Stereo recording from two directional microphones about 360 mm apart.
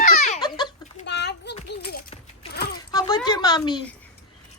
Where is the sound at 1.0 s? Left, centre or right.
Left.